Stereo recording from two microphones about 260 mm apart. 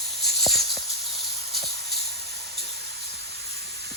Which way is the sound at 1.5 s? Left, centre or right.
Centre.